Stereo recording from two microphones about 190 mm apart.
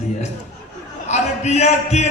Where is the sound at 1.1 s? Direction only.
35° left (ahead or behind).